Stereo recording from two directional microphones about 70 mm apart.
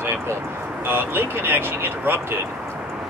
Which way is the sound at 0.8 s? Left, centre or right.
Right.